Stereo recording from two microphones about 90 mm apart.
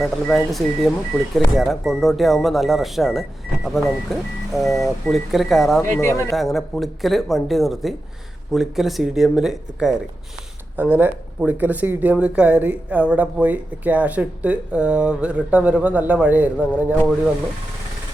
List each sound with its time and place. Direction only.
0.0 s speech: 5° left (ahead or behind)
6.0 s speech: 30° left (ahead or behind)
6.3 s speech: centre (ahead or behind)
10.8 s speech: 25° right (ahead or behind)